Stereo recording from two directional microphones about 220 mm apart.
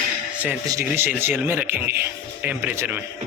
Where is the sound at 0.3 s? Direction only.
5° right (ahead or behind).